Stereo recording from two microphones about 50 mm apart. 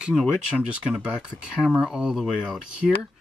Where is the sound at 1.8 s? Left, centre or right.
Centre.